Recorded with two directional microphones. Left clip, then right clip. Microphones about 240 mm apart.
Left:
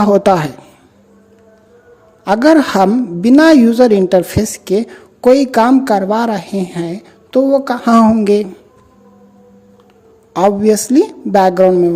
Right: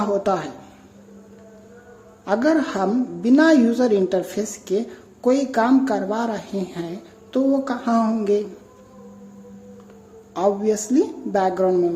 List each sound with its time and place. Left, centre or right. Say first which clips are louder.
0.0 s a woman's voice: left 11 dB; left
2.2 s a woman's voice: left 10 dB; left
10.3 s a woman's voice: left 9 dB; left